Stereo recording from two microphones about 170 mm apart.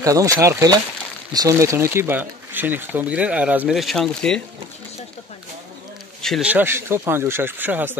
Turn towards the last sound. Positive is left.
turn(degrees=-10)  # may be behind; listen again after turning